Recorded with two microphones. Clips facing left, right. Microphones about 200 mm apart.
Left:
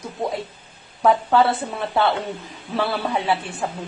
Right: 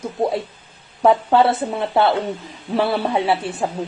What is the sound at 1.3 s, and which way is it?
A woman's voice, 25° right (ahead or behind).